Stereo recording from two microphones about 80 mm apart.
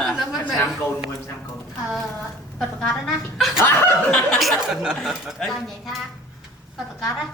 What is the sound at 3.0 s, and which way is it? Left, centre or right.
Speech, centre.